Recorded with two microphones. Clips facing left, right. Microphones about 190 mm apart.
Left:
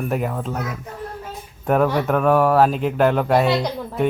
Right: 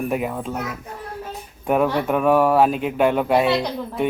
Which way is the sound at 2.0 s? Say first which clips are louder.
Even; 5° right (ahead or behind).